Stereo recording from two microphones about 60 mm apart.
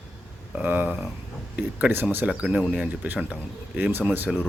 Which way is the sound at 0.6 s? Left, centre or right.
Right.